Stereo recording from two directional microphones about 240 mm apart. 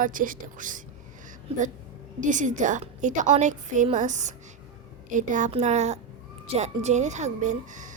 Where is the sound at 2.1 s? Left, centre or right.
Right.